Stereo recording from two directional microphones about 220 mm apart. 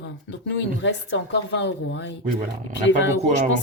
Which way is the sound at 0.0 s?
55° left (ahead or behind).